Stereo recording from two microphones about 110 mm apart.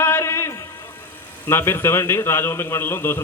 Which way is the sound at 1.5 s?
25° left (ahead or behind).